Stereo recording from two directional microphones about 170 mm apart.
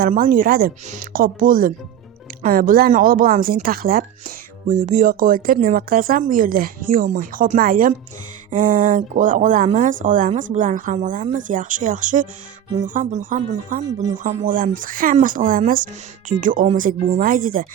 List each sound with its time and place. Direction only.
0.0 s speech: 55° right (ahead or behind)
4.7 s speech: 45° right (ahead or behind)